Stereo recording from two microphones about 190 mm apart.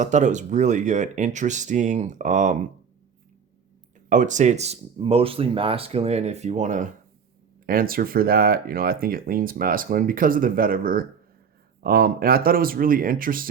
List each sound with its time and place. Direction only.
0.0 s speech: 40° right (ahead or behind)
4.1 s speech: 40° right (ahead or behind)